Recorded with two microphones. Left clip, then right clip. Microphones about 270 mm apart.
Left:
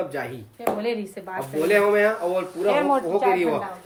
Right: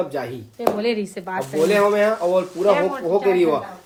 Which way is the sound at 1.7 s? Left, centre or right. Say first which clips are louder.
Even; centre.